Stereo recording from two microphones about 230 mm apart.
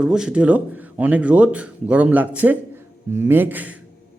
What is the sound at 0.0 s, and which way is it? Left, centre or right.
A man's voice, centre.